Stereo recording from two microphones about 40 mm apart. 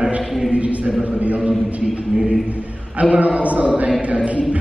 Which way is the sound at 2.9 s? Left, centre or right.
Right.